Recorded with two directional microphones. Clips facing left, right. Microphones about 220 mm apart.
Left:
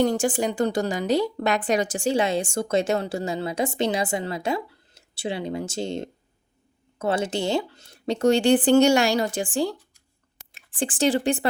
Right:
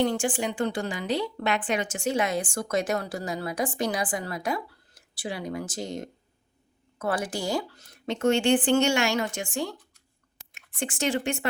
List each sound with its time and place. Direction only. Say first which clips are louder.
0.0 s a woman's voice: left 4 dB; 40° left (ahead or behind)